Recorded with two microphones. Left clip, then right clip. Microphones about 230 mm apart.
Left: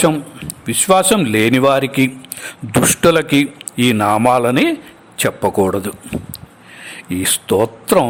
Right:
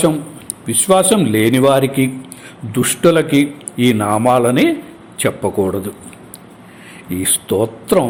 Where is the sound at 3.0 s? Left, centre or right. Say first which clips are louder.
Right 2 dB; left.